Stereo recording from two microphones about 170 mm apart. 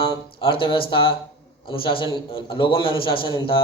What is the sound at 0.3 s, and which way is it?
Speech, 30° left (ahead or behind).